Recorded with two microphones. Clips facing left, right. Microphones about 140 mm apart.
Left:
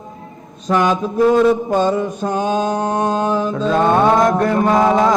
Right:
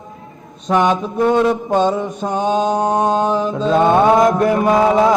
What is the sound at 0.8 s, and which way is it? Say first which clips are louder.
Mantra: left 1 dB; centre (ahead or behind).